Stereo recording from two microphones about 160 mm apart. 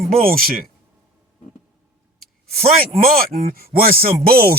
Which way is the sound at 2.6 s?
65° right (ahead or behind).